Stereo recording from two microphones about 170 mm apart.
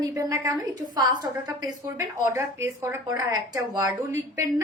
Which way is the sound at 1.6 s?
15° right (ahead or behind).